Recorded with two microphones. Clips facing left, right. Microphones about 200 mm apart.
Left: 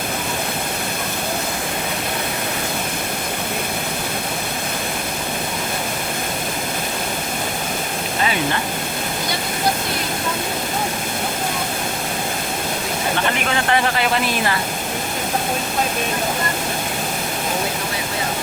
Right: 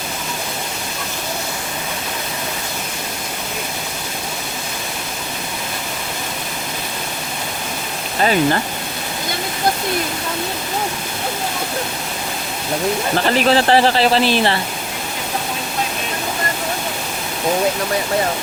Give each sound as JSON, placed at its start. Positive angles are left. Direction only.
{"t": 13.1, "sound": "speech", "side_deg": -35}